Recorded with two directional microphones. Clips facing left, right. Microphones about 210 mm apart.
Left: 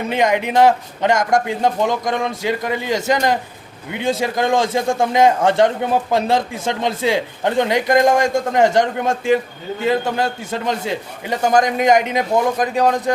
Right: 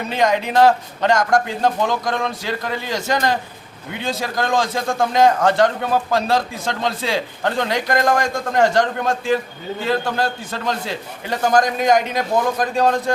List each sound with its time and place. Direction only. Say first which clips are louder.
0.1 s a man's voice: left 1 dB; 15° left (ahead or behind)